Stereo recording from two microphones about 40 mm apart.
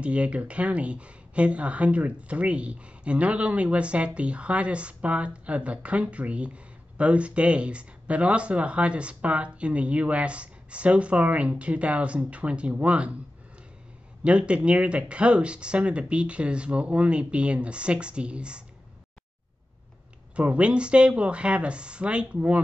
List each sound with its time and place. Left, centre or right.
0.0 s speech: right
14.2 s speech: right
20.3 s speech: right